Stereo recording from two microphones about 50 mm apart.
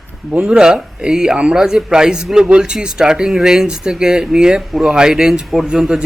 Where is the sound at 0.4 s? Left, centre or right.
Centre.